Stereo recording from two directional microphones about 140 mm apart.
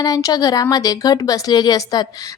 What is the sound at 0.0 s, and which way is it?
Speech, 25° left (ahead or behind).